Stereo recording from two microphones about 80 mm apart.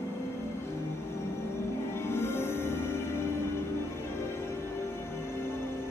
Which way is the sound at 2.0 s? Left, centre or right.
Left.